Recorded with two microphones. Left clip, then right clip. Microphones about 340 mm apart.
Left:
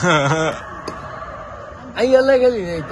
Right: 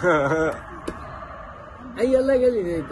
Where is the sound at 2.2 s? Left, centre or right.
Left.